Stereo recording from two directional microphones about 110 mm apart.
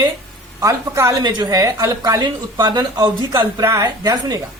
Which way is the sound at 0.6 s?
30° right (ahead or behind).